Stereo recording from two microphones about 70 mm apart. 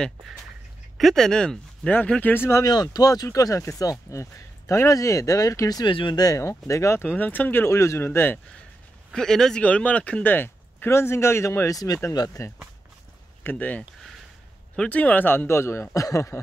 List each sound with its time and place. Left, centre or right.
0.9 s speech: centre
2.3 s speech: left
2.6 s speech: left
3.3 s speech: left
6.3 s speech: left
7.0 s speech: left
7.7 s speech: left
9.1 s speech: centre
9.6 s speech: centre
10.3 s speech: left
13.4 s speech: left
14.9 s speech: left